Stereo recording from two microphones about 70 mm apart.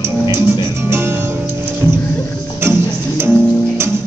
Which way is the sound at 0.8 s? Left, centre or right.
Right.